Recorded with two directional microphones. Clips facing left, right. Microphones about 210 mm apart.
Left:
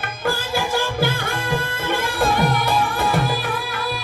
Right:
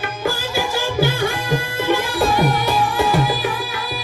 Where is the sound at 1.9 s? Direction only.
55° left (ahead or behind).